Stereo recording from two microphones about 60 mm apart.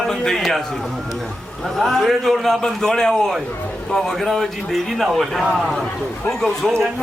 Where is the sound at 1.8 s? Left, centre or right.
Centre.